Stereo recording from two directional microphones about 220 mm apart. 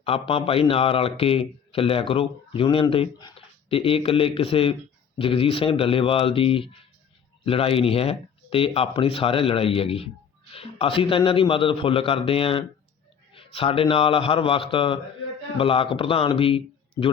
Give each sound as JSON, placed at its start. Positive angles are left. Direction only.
{"t": 0.0, "sound": "a man's voice", "side_deg": 25}